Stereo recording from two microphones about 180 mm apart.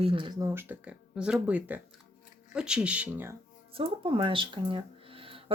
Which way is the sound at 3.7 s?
30° right (ahead or behind).